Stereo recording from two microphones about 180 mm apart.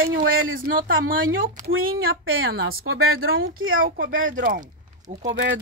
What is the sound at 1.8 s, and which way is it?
Speech, 90° right.